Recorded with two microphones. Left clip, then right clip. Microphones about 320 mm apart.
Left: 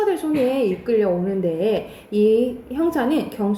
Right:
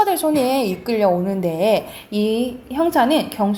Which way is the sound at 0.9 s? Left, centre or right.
Centre.